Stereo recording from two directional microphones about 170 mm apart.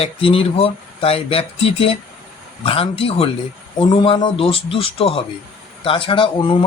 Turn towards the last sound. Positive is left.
turn(degrees=30)  # may be behind; listen again after turning